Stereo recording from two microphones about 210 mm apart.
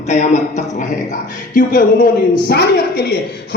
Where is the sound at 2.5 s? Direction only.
50° left (ahead or behind).